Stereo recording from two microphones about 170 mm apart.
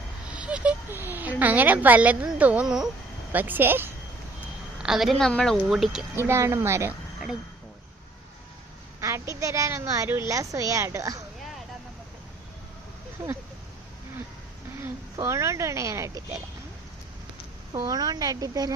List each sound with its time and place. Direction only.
0.3 s a sound: 5° right (ahead or behind)
3.3 s a woman's voice: 10° right (ahead or behind)
6.1 s speech: 15° right (ahead or behind)
9.0 s a woman's voice: 15° right (ahead or behind)
13.2 s speech: 15° right (ahead or behind)
15.1 s speech: 15° right (ahead or behind)
17.7 s a woman's voice: 20° right (ahead or behind)